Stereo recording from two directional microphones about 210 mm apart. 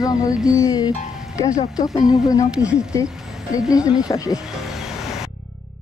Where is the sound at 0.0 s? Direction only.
15° left (ahead or behind).